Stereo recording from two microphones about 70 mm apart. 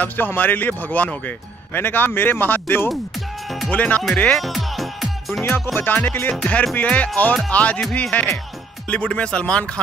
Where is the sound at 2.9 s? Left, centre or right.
Centre.